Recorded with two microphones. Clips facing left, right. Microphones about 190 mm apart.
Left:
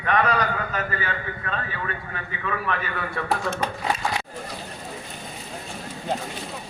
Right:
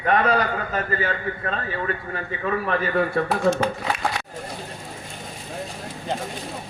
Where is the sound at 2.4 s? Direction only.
35° right (ahead or behind).